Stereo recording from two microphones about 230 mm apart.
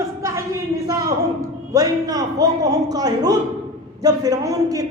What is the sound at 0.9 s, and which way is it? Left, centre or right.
A man's voice, centre.